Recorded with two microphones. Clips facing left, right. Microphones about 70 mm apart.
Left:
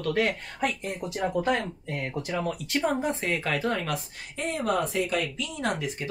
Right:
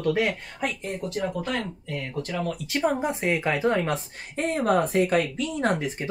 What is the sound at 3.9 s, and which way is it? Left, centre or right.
Speech, right.